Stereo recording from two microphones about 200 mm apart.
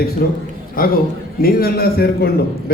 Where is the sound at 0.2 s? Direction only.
50° left (ahead or behind).